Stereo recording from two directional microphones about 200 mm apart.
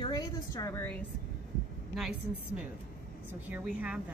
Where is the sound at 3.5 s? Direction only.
5° right (ahead or behind).